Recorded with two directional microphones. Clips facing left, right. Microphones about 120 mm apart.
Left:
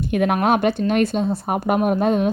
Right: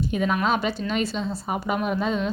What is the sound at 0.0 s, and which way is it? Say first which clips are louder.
Speech: left 5 dB; 60° left (ahead or behind).